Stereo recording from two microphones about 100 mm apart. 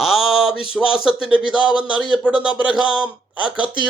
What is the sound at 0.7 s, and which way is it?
Speech, 10° right (ahead or behind).